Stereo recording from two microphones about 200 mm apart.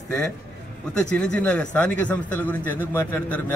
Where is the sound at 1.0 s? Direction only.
5° left (ahead or behind).